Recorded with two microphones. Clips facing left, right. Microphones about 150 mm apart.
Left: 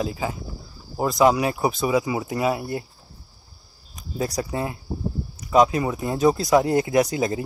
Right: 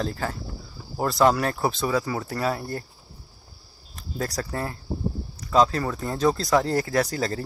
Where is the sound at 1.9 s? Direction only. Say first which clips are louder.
Left 3 dB; 20° left (ahead or behind).